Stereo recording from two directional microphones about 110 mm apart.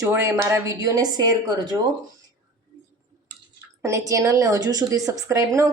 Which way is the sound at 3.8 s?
30° right (ahead or behind).